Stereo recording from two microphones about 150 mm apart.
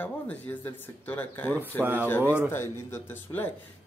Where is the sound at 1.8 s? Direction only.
10° right (ahead or behind).